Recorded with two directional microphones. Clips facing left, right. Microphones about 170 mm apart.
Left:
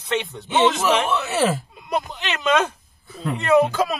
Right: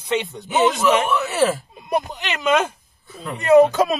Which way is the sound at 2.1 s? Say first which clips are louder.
Left 1 dB; 10° right (ahead or behind).